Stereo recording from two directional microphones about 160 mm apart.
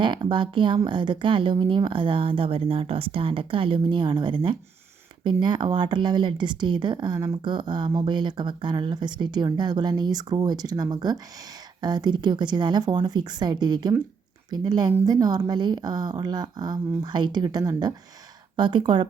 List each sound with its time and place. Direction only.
0.0 s speech: 30° right (ahead or behind)